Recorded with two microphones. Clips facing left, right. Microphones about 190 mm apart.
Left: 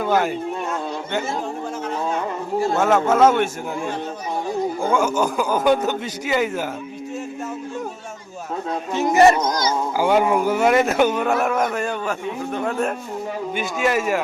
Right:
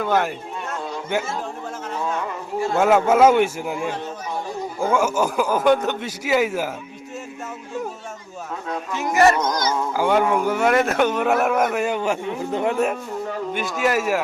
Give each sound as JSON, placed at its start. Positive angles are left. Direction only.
{"t": 0.0, "sound": "speech", "side_deg": 0}
{"t": 2.7, "sound": "a man's voice", "side_deg": -10}
{"t": 8.7, "sound": "speech", "side_deg": 30}
{"t": 10.0, "sound": "speech", "side_deg": 5}
{"t": 12.5, "sound": "a man's voice", "side_deg": -25}
{"t": 13.5, "sound": "speech", "side_deg": 0}